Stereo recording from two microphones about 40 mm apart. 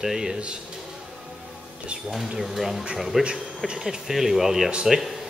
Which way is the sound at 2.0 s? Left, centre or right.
Centre.